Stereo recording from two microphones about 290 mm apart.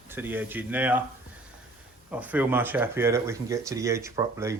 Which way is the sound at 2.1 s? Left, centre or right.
Centre.